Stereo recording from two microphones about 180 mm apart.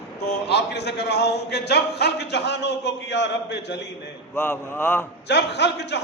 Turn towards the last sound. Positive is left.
turn(degrees=70)  # may be behind; listen again after turning